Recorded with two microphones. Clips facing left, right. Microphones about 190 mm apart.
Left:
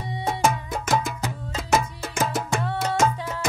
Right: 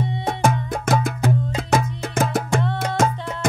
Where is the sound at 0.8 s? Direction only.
55° right (ahead or behind).